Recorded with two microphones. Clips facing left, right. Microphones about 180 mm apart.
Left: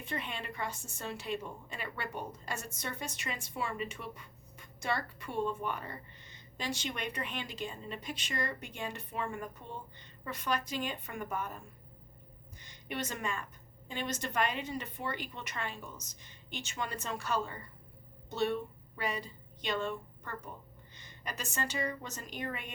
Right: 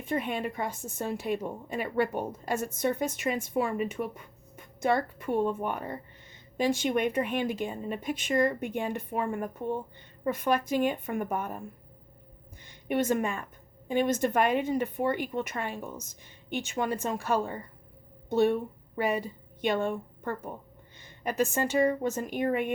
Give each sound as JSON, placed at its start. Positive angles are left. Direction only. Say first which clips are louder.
{"t": 0.0, "sound": "a woman's voice", "louder": "right 10 dB", "side_deg": -50}
{"t": 12.5, "sound": "a sound", "louder": "right 11 dB", "side_deg": -55}
{"t": 13.8, "sound": "speech", "louder": "right 12 dB", "side_deg": -50}